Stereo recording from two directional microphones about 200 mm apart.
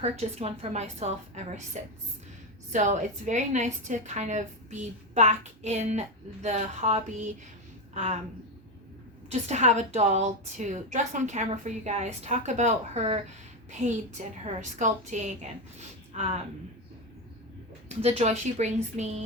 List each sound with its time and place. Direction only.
0.0 s a woman's voice: 30° right (ahead or behind)
9.3 s a woman's voice: 35° right (ahead or behind)
17.8 s a woman's voice: 35° right (ahead or behind)